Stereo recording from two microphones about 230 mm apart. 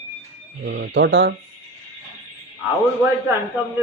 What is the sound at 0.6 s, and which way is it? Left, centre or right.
Speech, right.